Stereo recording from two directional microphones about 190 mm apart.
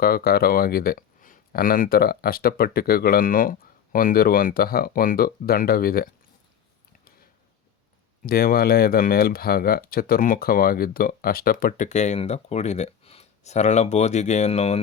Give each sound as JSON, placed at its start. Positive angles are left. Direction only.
{"t": 0.0, "sound": "speech", "side_deg": 55}
{"t": 8.2, "sound": "speech", "side_deg": 50}